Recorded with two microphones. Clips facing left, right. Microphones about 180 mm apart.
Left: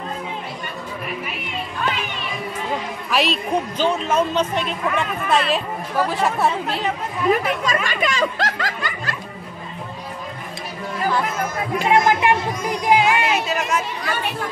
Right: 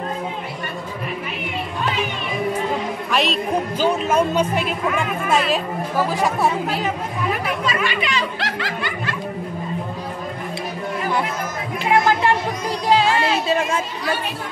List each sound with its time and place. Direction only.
3.1 s speech: centre (ahead or behind)
7.6 s speech: 45° left (ahead or behind)
11.9 s speech: 15° left (ahead or behind)
13.5 s speech: 30° right (ahead or behind)